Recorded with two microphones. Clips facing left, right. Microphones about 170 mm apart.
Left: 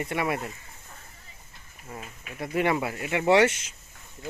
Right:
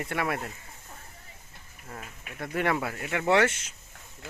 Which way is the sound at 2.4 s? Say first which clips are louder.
Left 3 dB; 5° left (ahead or behind).